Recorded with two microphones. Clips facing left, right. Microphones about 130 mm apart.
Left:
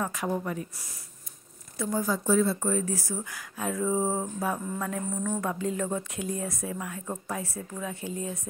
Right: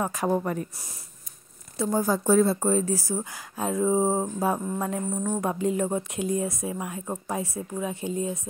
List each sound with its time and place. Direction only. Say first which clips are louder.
0.1 s speech: right 5 dB; 40° right (ahead or behind)
1.8 s a woman's voice: right 4 dB; 35° right (ahead or behind)